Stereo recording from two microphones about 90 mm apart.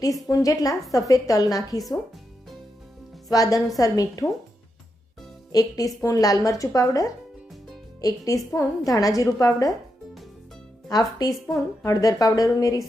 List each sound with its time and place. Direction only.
0.0 s speech: 40° left (ahead or behind)
3.2 s speech: 40° left (ahead or behind)
5.5 s speech: 45° left (ahead or behind)
10.8 s speech: 45° left (ahead or behind)